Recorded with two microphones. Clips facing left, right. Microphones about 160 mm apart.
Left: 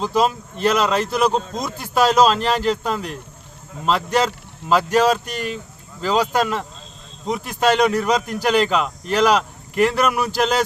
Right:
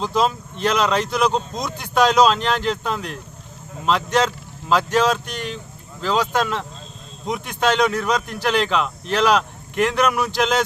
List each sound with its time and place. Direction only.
0.0 s a man's voice: 5° left (ahead or behind)